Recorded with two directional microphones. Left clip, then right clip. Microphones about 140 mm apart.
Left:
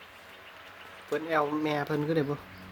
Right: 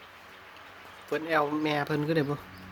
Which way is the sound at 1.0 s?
Centre (ahead or behind).